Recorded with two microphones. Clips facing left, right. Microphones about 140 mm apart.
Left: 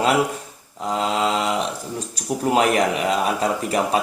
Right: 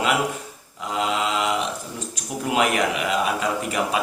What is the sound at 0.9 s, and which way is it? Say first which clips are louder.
Mantra: left 2 dB; 35° left (ahead or behind).